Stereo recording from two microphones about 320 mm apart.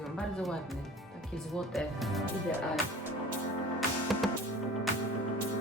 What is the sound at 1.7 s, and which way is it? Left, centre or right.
Speech, centre.